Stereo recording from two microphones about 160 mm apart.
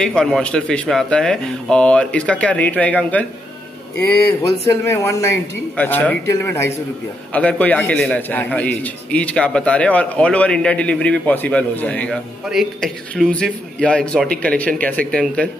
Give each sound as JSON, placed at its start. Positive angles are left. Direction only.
{"t": 0.0, "sound": "a man's voice", "side_deg": 5}
{"t": 4.6, "sound": "a man's voice", "side_deg": 15}